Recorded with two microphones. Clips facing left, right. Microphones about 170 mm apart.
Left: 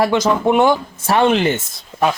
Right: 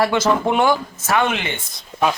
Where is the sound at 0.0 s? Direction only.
15° left (ahead or behind).